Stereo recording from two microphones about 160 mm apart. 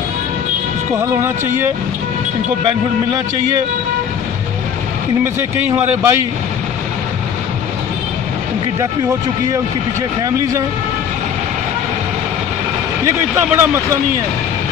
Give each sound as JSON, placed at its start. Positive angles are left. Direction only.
{"t": 0.9, "sound": "speech", "side_deg": -15}
{"t": 5.8, "sound": "speech", "side_deg": -15}
{"t": 13.5, "sound": "speech", "side_deg": -15}